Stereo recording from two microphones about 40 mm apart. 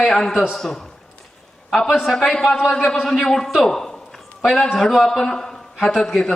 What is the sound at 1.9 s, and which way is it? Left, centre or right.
Speech, centre.